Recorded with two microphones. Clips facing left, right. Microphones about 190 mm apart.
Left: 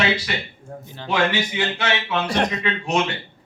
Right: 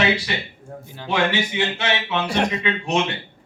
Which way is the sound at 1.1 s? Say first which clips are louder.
Even; 25° right (ahead or behind).